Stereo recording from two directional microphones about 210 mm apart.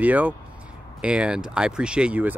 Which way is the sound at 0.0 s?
5° right (ahead or behind).